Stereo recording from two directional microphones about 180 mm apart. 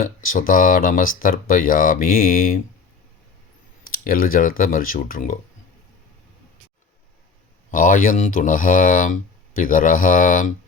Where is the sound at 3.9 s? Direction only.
50° left (ahead or behind).